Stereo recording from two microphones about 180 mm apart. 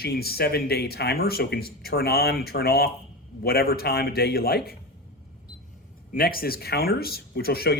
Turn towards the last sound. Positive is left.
turn(degrees=60)  # may be behind; listen again after turning